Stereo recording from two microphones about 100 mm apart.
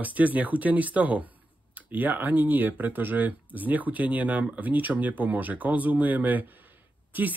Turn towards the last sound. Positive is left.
turn(degrees=-20)  # may be behind; listen again after turning